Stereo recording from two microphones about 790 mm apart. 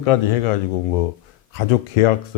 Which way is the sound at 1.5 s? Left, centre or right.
Left.